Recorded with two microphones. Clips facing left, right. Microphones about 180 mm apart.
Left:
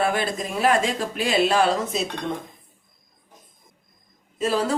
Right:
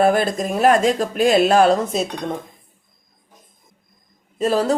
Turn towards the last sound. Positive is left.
turn(degrees=-40)  # may be behind; listen again after turning